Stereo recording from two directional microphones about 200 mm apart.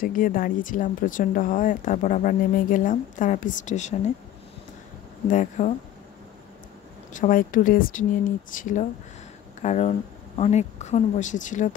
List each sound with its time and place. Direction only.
0.0 s speech: 45° left (ahead or behind)
5.3 s speech: 40° left (ahead or behind)
7.1 s speech: 40° left (ahead or behind)